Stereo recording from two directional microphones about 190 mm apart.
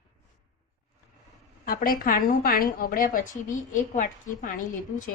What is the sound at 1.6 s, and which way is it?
A woman's voice, 50° left (ahead or behind).